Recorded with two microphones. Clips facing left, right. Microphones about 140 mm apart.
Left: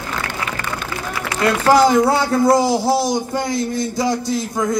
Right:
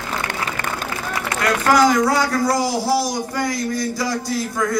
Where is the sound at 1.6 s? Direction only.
30° left (ahead or behind).